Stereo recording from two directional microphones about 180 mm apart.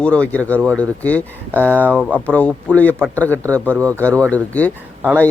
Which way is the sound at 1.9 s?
10° right (ahead or behind).